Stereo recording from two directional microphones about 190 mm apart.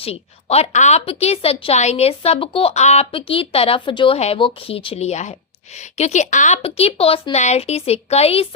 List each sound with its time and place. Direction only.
0.0 s a woman's voice: 30° left (ahead or behind)